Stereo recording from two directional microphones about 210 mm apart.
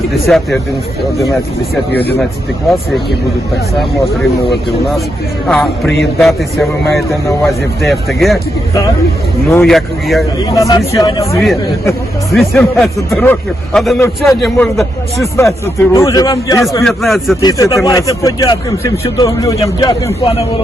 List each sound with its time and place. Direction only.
0.3 s a man's voice: centre (ahead or behind)
5.5 s a man's voice: centre (ahead or behind)
9.5 s a man's voice: 5° left (ahead or behind)
10.5 s speech: 15° left (ahead or behind)
12.3 s a man's voice: centre (ahead or behind)
15.4 s speech: 10° left (ahead or behind)
16.8 s a man's voice: centre (ahead or behind)
17.4 s speech: 15° left (ahead or behind)